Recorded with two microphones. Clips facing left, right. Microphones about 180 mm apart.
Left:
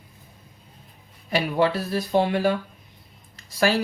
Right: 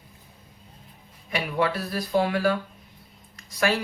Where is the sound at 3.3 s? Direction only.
30° left (ahead or behind).